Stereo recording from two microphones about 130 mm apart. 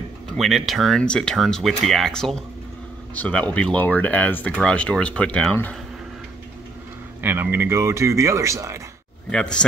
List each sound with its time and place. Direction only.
0.3 s speech: centre (ahead or behind)
7.2 s speech: 15° right (ahead or behind)
9.3 s speech: 5° left (ahead or behind)